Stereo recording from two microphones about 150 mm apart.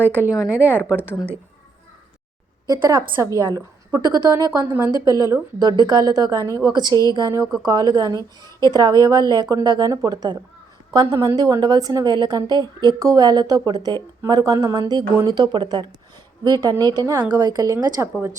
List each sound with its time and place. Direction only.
0.7 s speech: 15° left (ahead or behind)
2.6 s a woman's voice: 30° right (ahead or behind)
4.6 s a woman's voice: 15° right (ahead or behind)
5.0 s a woman's voice: 25° right (ahead or behind)